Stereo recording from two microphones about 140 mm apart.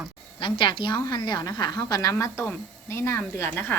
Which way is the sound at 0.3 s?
35° left (ahead or behind).